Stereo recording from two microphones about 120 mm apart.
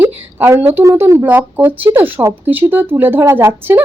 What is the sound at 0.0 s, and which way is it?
Speech, 20° right (ahead or behind).